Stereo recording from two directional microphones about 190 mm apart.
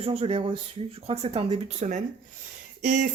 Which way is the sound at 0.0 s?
30° right (ahead or behind).